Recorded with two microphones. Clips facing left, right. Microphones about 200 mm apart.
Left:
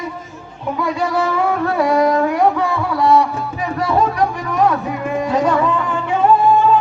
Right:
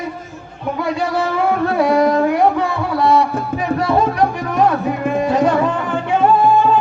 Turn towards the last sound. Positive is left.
turn(degrees=-25)  # may be behind; listen again after turning